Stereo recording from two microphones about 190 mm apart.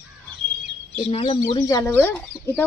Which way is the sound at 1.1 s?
30° left (ahead or behind).